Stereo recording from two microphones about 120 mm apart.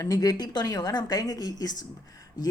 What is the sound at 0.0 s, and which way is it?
Speech, 30° left (ahead or behind).